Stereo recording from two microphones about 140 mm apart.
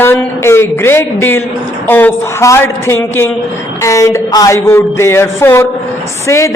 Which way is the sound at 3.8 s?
20° left (ahead or behind).